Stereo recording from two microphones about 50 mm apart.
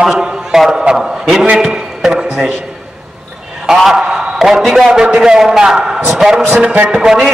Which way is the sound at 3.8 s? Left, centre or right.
Centre.